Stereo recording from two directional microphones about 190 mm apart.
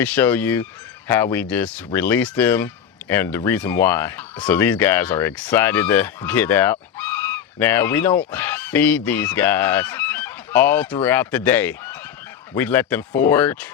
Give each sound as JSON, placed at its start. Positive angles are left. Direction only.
{"t": 0.0, "sound": "speech", "side_deg": 10}
{"t": 8.3, "sound": "fowl", "side_deg": 10}
{"t": 11.0, "sound": "speech", "side_deg": 10}